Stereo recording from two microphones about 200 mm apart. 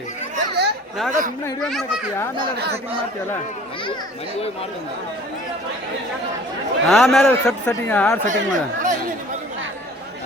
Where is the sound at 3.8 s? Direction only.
25° left (ahead or behind).